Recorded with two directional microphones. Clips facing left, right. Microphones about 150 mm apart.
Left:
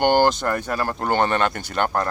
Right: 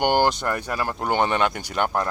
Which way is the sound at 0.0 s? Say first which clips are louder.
Left 3 dB; 10° right (ahead or behind).